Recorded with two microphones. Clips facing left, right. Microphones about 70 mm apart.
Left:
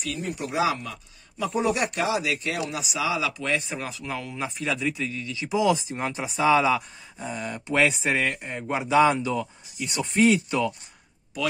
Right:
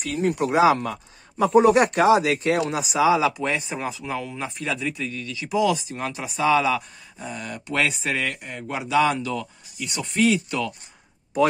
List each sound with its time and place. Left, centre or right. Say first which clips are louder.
0.2 s speech: right 9 dB; right
0.6 s speech: right 6 dB; right
3.3 s speech: right 2 dB; centre
5.3 s speech: right 1 dB; left